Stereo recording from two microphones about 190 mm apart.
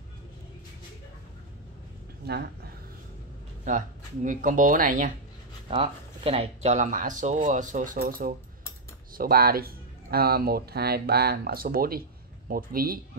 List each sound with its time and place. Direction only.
2.2 s speech: 55° right (ahead or behind)
3.6 s speech: 40° right (ahead or behind)
5.7 s speech: 30° right (ahead or behind); by 13.0 s 50° right (ahead or behind)